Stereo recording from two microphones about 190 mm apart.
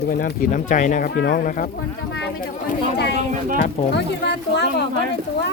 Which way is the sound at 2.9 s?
60° left (ahead or behind).